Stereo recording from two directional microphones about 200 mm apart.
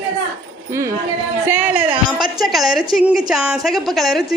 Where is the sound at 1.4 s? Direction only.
10° right (ahead or behind).